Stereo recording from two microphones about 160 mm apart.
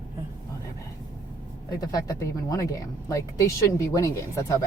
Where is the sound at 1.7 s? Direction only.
25° left (ahead or behind).